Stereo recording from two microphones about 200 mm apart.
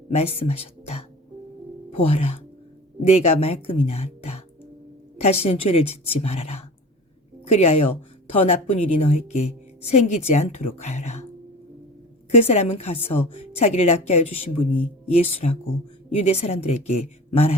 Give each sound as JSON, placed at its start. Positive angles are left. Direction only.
{"t": 0.1, "sound": "a woman's voice", "side_deg": 30}
{"t": 12.3, "sound": "a woman's voice", "side_deg": 30}